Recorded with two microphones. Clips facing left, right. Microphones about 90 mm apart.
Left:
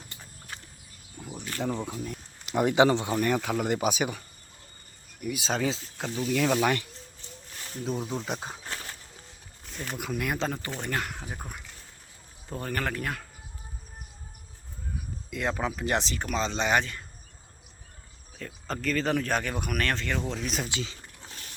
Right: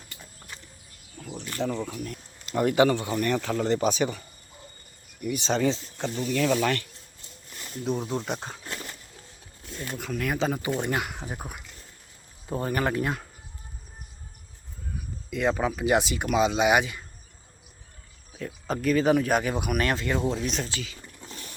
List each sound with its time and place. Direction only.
1.2 s a sound: 15° left (ahead or behind)
1.6 s speech: 15° left (ahead or behind)
5.2 s speech: centre (ahead or behind)
7.9 s speech: centre (ahead or behind)
10.2 s speech: centre (ahead or behind)
10.6 s speech: 15° right (ahead or behind)
15.3 s speech: centre (ahead or behind)
18.3 s speech: 10° right (ahead or behind)
20.7 s speech: 20° left (ahead or behind)